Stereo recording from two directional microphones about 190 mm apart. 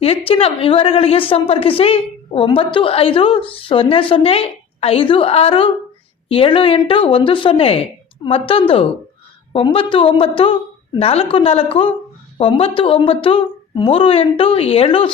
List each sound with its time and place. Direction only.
0.0 s a woman's voice: 30° left (ahead or behind)